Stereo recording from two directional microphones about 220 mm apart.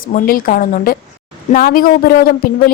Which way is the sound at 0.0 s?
40° left (ahead or behind).